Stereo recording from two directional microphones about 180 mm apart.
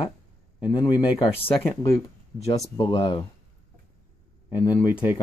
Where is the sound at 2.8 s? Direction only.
25° left (ahead or behind).